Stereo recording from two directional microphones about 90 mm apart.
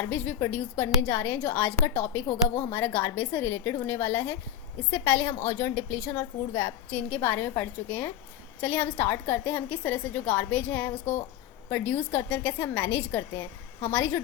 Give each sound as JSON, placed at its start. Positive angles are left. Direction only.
{"t": 0.0, "sound": "a woman's voice", "side_deg": 20}